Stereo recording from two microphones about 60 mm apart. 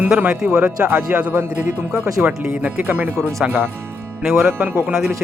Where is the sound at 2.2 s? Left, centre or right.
Right.